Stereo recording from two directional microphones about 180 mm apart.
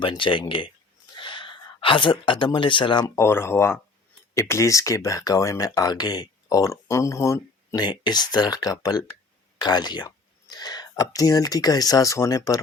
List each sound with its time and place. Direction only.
0.0 s speech: 25° left (ahead or behind)
3.2 s speech: 15° left (ahead or behind)